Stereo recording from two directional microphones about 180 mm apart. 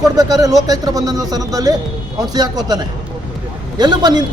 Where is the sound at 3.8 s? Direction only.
25° right (ahead or behind).